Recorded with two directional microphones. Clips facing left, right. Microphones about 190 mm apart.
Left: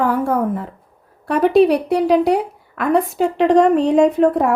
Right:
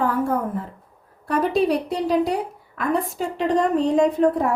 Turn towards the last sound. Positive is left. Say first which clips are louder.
# left 4 dB
turn(degrees=65)  # may be behind; listen again after turning